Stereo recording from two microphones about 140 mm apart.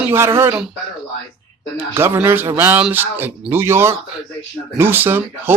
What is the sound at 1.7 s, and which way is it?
Speech, 15° right (ahead or behind).